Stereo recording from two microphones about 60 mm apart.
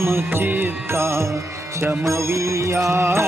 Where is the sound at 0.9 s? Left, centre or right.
Right.